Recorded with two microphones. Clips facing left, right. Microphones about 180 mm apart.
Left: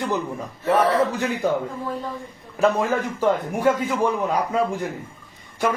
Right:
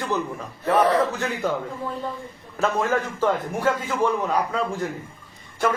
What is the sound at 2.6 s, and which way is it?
Speech, 15° left (ahead or behind).